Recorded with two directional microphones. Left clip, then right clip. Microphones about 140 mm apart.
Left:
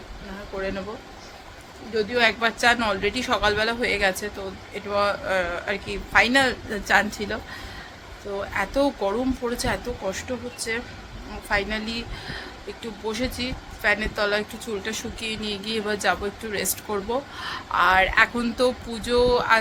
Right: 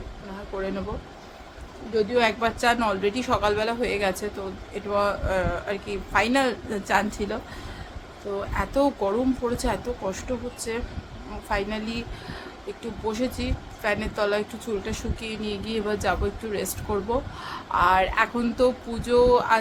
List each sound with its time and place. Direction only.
2.0 s speech: 25° right (ahead or behind)
8.4 s speech: 15° right (ahead or behind)